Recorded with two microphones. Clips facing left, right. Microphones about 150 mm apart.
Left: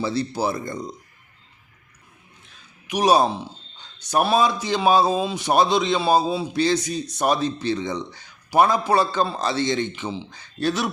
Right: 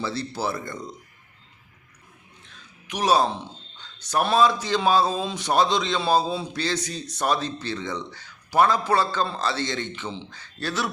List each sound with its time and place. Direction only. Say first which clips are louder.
0.0 s speech: left 4 dB; 15° left (ahead or behind)
2.8 s speech: left 3 dB; 15° left (ahead or behind)